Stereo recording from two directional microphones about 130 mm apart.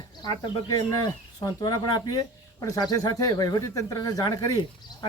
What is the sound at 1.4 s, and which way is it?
Speech, 30° left (ahead or behind).